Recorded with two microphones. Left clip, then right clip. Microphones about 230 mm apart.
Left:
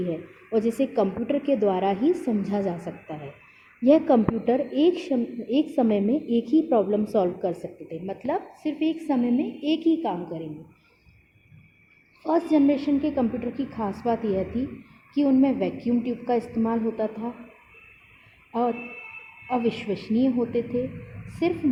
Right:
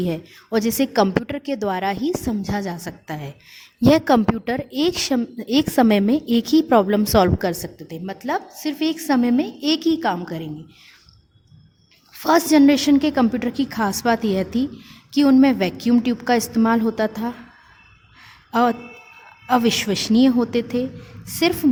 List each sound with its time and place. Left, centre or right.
0.1 s a woman's voice: right
12.3 s a woman's voice: right
18.5 s a woman's voice: right